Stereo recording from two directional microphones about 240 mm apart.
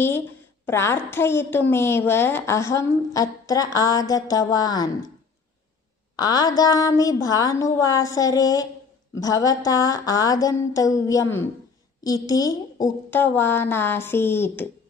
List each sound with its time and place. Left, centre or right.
0.7 s a woman's voice: centre
6.1 s a woman's voice: centre